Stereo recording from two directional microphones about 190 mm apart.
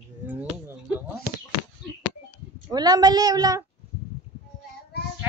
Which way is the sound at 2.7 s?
20° right (ahead or behind).